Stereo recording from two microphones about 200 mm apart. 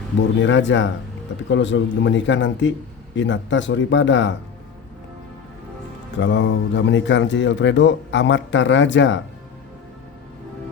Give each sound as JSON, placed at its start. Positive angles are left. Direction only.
{"t": 0.3, "sound": "a man's voice", "side_deg": 65}
{"t": 6.2, "sound": "a man's voice", "side_deg": 65}